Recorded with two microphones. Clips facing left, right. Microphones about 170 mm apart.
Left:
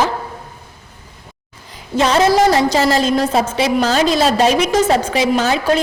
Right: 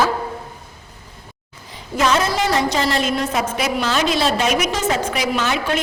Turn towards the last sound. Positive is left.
turn(degrees=35)  # may be behind; listen again after turning